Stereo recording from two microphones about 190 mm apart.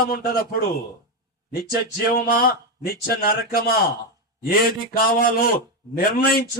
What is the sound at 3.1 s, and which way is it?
Speech, 50° left (ahead or behind).